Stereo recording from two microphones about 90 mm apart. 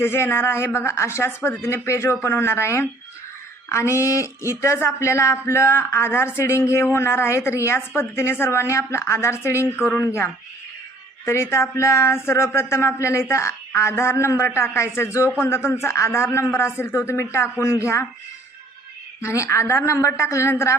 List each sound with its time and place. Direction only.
0.0 s speech: 25° left (ahead or behind)
19.2 s speech: 35° left (ahead or behind)